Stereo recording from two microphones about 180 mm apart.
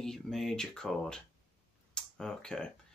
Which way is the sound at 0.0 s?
Centre (ahead or behind).